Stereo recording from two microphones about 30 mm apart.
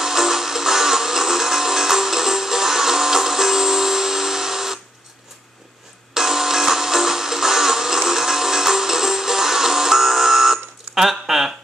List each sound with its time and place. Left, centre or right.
0.0 s music: centre
6.1 s music: centre